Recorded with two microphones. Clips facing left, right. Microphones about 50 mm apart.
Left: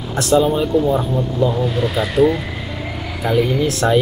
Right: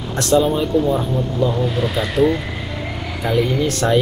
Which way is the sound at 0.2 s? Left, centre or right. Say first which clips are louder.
Left 1 dB; centre.